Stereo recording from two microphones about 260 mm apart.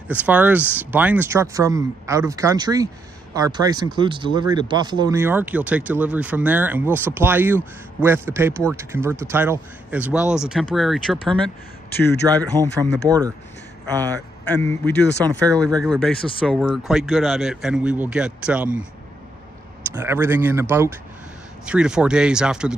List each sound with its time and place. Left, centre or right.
0.1 s speech: centre
12.2 s speech: centre
14.5 s speech: centre
19.9 s speech: centre